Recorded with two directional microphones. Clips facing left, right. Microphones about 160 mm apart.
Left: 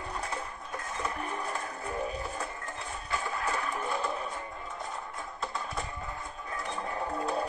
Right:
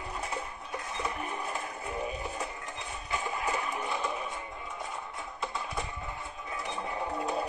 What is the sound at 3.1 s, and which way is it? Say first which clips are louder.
Music: even; 15° right (ahead or behind).